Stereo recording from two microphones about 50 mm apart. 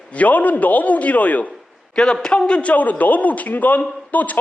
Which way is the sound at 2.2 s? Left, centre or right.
Centre.